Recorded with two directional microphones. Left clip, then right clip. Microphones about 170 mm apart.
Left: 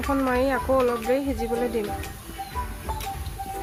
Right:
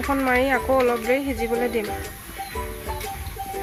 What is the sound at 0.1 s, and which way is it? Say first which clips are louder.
Speech: right 3 dB; 15° right (ahead or behind).